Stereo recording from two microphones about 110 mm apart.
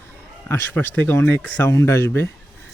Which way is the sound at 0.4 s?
20° left (ahead or behind).